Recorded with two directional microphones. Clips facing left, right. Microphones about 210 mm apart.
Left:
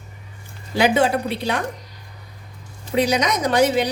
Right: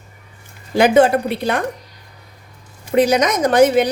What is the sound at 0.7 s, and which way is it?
Speech, 50° right (ahead or behind).